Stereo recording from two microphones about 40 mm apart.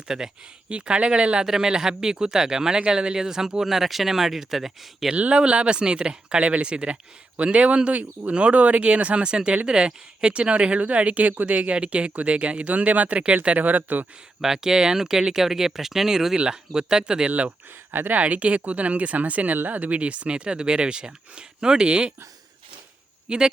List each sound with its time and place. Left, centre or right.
0.1 s speech: centre
0.7 s speech: right
1.5 s speech: centre
5.1 s speech: right
13.6 s speech: right
14.4 s speech: centre
17.2 s speech: right
23.3 s speech: centre